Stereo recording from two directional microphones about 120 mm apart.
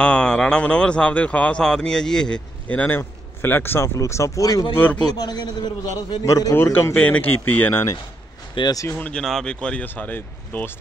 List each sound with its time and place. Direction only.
0.0 s speech: 10° left (ahead or behind); by 4.6 s 30° left (ahead or behind)
4.7 s speech: 15° left (ahead or behind)
5.0 s a man's voice: 35° left (ahead or behind)
6.5 s speech: 20° left (ahead or behind)
8.5 s a man's voice: 35° left (ahead or behind)
8.8 s speech: 10° left (ahead or behind)